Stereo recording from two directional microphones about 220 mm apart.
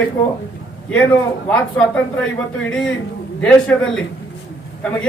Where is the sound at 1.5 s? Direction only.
5° left (ahead or behind).